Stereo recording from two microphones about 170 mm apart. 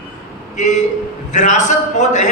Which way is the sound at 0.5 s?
45° left (ahead or behind).